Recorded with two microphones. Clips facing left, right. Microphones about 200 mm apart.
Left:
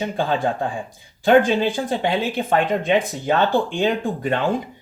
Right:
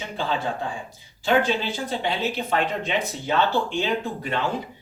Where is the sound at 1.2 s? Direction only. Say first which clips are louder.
Left 7 dB; 50° left (ahead or behind).